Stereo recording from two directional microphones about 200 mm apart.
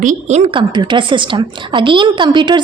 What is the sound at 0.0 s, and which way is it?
A woman's voice, 35° right (ahead or behind).